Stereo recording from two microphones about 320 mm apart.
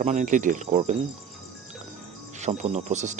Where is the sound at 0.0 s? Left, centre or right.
Right.